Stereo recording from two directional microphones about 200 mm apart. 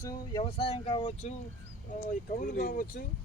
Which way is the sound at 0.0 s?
25° left (ahead or behind).